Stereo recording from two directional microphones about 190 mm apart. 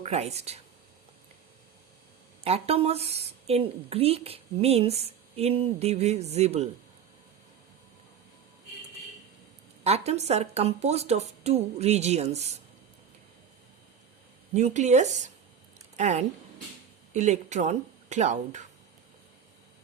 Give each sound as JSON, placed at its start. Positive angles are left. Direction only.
{"t": 0.0, "sound": "speech", "side_deg": -35}
{"t": 2.4, "sound": "speech", "side_deg": -30}
{"t": 9.8, "sound": "speech", "side_deg": -35}
{"t": 14.5, "sound": "speech", "side_deg": -40}